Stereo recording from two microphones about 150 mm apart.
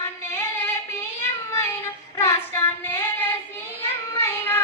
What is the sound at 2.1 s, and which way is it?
Child singing, 15° left (ahead or behind).